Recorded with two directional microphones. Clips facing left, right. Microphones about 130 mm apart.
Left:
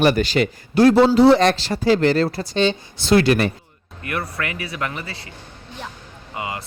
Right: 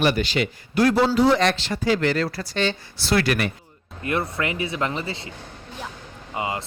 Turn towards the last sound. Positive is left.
turn(degrees=-25)  # may be behind; listen again after turning